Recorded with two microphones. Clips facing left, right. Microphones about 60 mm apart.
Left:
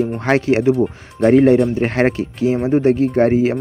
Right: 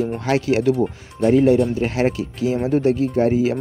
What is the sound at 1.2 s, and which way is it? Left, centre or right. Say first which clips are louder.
Speech: left 4 dB; left.